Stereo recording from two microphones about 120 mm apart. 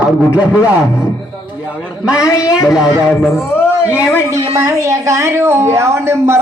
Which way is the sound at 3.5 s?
20° left (ahead or behind).